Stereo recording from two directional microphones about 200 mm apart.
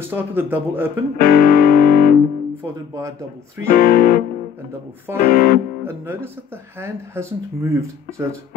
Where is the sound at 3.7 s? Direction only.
45° left (ahead or behind).